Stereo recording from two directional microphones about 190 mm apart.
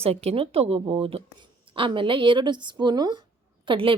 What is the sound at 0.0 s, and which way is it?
A woman's voice, 35° right (ahead or behind).